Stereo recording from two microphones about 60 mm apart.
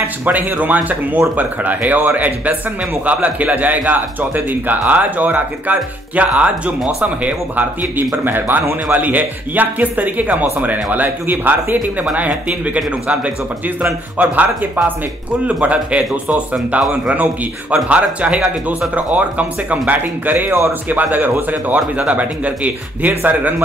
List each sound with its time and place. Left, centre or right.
0.2 s speech: right
12.6 s speech: right